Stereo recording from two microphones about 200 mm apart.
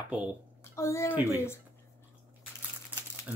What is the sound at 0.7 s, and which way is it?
Speech, 15° left (ahead or behind).